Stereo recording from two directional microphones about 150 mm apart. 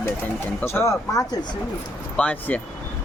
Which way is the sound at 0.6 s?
15° left (ahead or behind).